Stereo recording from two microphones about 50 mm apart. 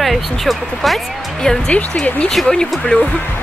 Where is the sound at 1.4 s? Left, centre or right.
Centre.